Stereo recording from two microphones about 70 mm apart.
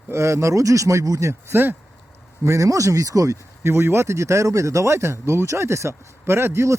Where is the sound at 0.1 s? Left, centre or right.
Right.